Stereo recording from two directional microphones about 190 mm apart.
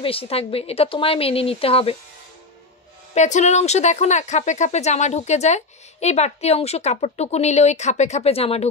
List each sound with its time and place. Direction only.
0.0 s speech: 30° left (ahead or behind)
3.2 s speech: 40° left (ahead or behind)